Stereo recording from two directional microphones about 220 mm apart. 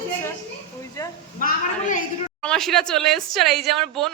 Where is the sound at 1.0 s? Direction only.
15° left (ahead or behind).